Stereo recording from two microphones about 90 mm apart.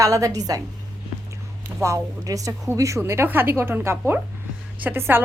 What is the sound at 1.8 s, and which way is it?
Speech, 35° right (ahead or behind).